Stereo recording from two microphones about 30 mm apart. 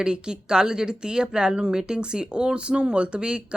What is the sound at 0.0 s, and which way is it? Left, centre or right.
Speech, right.